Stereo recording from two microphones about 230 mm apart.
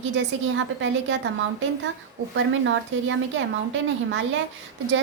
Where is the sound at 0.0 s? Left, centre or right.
Right.